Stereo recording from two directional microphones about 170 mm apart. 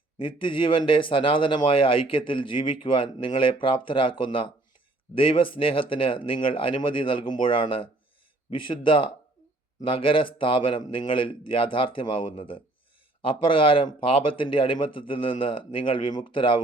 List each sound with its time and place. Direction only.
0.2 s speech: 30° left (ahead or behind)